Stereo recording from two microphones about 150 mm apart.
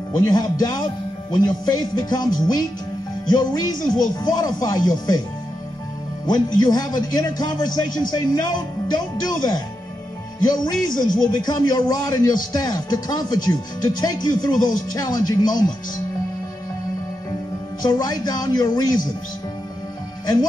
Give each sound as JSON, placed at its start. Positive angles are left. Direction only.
{"t": 0.3, "sound": "a man's voice", "side_deg": 25}
{"t": 6.2, "sound": "a man's voice", "side_deg": 25}
{"t": 17.8, "sound": "a man's voice", "side_deg": 25}